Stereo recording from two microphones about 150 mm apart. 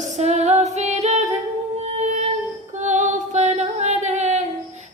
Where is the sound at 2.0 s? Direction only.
50° right (ahead or behind).